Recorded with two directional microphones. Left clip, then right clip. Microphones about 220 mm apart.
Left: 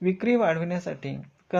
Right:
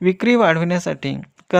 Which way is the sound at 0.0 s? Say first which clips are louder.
Right 8 dB; 45° right (ahead or behind).